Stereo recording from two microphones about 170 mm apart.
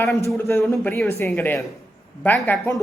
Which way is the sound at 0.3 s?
15° left (ahead or behind).